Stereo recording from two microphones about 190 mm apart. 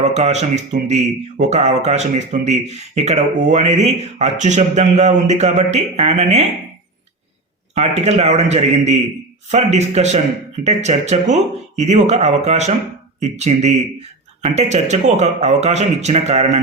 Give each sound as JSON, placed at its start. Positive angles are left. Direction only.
{"t": 0.0, "sound": "speech", "side_deg": -35}
{"t": 7.8, "sound": "speech", "side_deg": -35}